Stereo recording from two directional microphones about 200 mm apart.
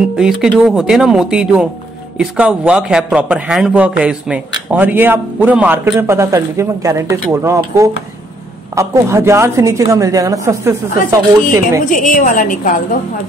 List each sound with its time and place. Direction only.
0.1 s a man's voice: 5° right (ahead or behind)
11.8 s a woman's voice: 40° left (ahead or behind)